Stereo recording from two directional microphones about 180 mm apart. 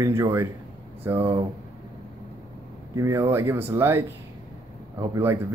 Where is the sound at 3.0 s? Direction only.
15° right (ahead or behind).